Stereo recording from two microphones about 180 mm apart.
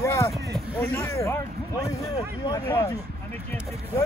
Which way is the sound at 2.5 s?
15° left (ahead or behind).